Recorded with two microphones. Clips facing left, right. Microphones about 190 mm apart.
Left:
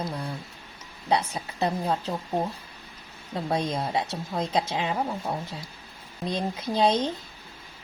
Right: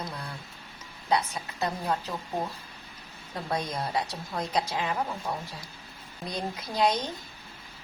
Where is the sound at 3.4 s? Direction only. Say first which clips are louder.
Left 4 dB; 25° left (ahead or behind).